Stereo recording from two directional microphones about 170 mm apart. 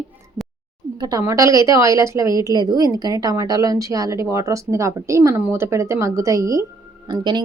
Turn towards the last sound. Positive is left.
turn(degrees=-25)  # may be behind; listen again after turning